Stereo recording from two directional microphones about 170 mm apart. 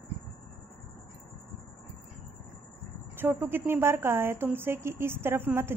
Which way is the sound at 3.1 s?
10° right (ahead or behind).